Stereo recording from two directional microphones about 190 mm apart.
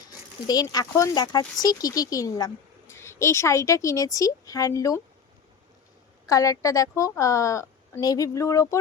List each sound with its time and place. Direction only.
0.4 s a woman's voice: 20° left (ahead or behind)
6.2 s a woman's voice: 15° left (ahead or behind)